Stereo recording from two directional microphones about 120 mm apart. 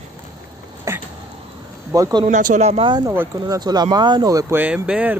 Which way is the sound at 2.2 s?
90° right.